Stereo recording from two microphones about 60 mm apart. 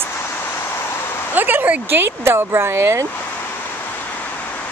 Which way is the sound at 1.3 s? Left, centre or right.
Right.